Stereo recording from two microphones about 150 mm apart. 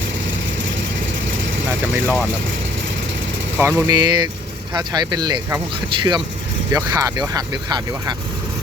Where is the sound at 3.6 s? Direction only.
15° right (ahead or behind).